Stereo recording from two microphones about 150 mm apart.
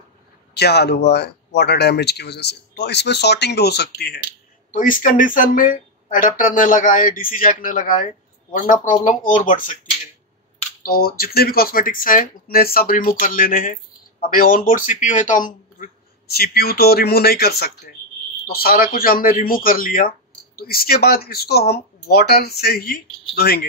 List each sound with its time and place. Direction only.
0.6 s speech: 90° left
4.6 s speech: 60° left (ahead or behind)
10.8 s speech: 75° left (ahead or behind)